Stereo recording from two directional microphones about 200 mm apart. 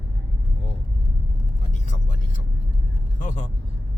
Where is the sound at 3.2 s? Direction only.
35° left (ahead or behind).